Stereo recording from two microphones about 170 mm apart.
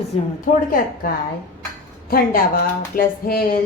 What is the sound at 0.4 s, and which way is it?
A woman's voice, 55° left (ahead or behind).